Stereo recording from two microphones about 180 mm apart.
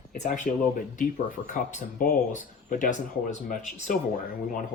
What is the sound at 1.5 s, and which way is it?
Speech, 40° left (ahead or behind).